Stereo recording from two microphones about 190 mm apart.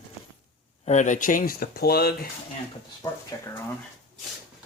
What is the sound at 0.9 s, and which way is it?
Speech, 40° left (ahead or behind).